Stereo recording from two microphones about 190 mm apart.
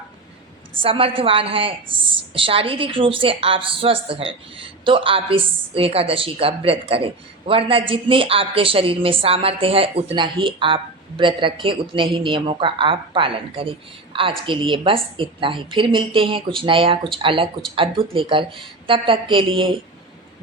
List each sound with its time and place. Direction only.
0.8 s a woman's voice: 30° right (ahead or behind)